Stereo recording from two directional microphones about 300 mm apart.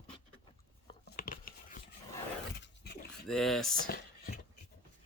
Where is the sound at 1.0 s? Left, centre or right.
Left.